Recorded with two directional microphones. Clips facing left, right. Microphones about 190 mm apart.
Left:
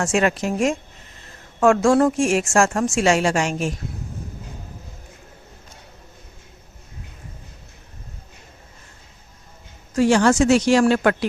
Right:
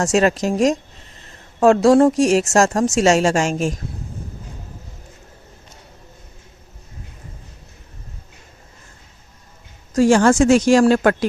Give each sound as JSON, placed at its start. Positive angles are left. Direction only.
{"t": 0.0, "sound": "a woman's voice", "side_deg": -35}
{"t": 9.9, "sound": "speech", "side_deg": -45}